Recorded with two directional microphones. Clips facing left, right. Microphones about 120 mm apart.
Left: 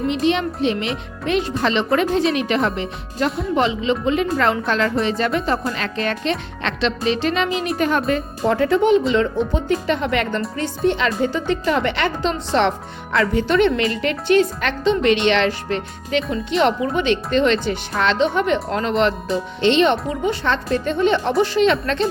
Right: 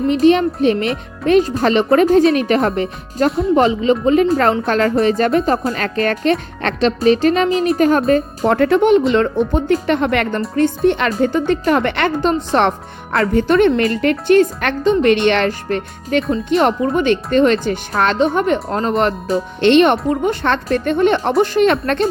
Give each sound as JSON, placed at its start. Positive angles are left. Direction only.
{"t": 0.1, "sound": "a woman's voice", "side_deg": -45}
{"t": 3.2, "sound": "speech", "side_deg": 0}
{"t": 3.5, "sound": "a woman's voice", "side_deg": -45}
{"t": 8.4, "sound": "a woman's voice", "side_deg": -60}
{"t": 19.6, "sound": "a woman's voice", "side_deg": -55}